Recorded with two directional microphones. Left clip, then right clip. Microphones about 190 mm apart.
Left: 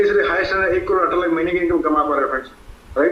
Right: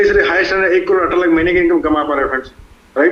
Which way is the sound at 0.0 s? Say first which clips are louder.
Right 4 dB; 55° right (ahead or behind).